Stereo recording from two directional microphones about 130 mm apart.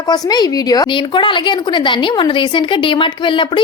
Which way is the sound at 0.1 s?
30° left (ahead or behind).